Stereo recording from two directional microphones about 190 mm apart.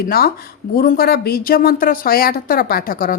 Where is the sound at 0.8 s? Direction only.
50° left (ahead or behind).